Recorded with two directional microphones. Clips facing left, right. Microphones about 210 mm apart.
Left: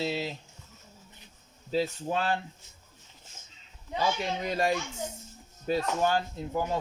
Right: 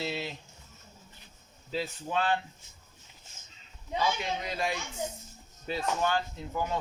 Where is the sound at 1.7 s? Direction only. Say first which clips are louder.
Left 4 dB; 40° left (ahead or behind).